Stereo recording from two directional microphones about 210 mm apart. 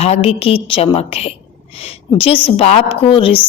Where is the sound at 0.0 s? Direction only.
30° left (ahead or behind).